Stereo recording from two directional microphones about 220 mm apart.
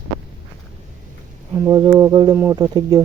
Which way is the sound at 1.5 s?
15° right (ahead or behind).